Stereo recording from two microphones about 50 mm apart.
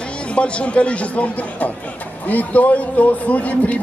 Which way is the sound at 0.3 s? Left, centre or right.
Left.